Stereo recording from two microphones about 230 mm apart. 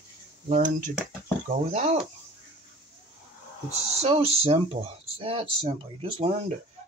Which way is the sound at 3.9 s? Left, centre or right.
Right.